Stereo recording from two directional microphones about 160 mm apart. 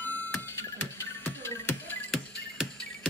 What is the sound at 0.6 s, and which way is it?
Music, 15° left (ahead or behind).